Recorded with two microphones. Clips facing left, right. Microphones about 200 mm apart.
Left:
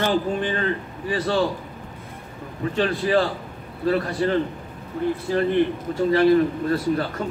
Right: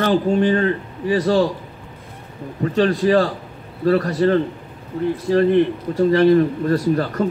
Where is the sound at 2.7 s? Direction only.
40° right (ahead or behind).